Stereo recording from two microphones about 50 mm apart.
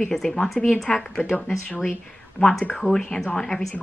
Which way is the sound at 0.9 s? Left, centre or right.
Left.